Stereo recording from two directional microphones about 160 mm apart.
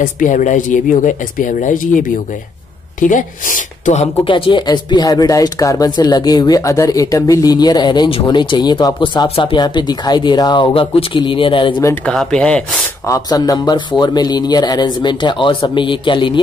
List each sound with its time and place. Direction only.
0.0 s speech: 55° left (ahead or behind); by 11.7 s 30° left (ahead or behind)
12.1 s speech: 5° left (ahead or behind)
13.0 s speech: 20° left (ahead or behind)